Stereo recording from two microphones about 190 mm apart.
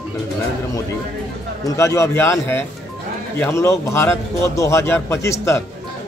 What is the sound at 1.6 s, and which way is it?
A man's voice, 15° left (ahead or behind).